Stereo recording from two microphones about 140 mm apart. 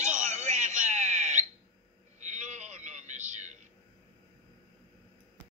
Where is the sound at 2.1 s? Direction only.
60° right (ahead or behind).